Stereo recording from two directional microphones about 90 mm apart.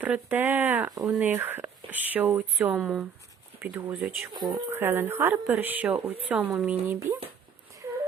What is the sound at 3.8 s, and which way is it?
Speech, 25° right (ahead or behind).